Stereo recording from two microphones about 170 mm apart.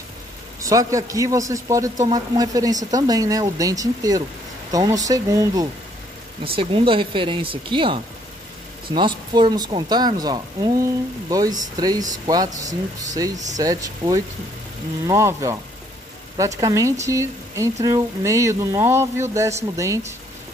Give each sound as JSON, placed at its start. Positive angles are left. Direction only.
{"t": 0.6, "sound": "speech", "side_deg": -20}
{"t": 6.4, "sound": "speech", "side_deg": -30}